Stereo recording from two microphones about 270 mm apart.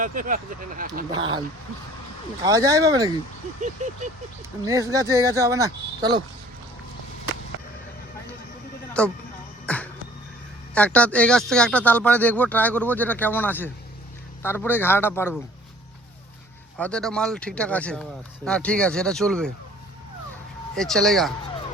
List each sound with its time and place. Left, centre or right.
0.0 s speech: right
1.1 s speech: centre
2.4 s speech: centre
4.6 s speech: centre
9.0 s speech: centre
9.6 s music: centre
10.8 s speech: centre
16.7 s speech: centre
20.7 s speech: centre